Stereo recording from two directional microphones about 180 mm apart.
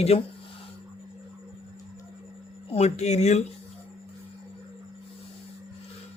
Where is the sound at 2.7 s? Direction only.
40° left (ahead or behind).